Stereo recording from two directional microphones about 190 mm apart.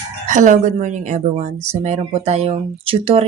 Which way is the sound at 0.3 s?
40° right (ahead or behind).